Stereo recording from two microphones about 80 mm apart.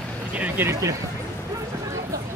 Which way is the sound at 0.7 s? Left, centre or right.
Right.